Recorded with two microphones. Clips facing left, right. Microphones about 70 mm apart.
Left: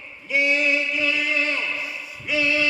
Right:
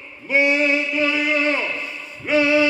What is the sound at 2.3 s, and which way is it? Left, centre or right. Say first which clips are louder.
Music: right 6 dB; right.